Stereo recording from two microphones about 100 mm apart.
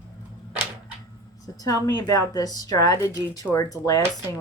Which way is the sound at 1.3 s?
35° left (ahead or behind).